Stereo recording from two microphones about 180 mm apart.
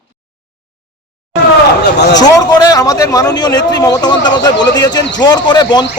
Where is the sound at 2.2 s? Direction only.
20° left (ahead or behind).